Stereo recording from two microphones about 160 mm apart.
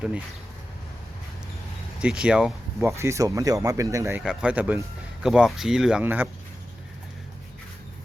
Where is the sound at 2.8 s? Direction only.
20° right (ahead or behind).